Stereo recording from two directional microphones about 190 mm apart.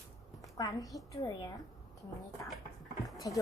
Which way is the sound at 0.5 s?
20° left (ahead or behind).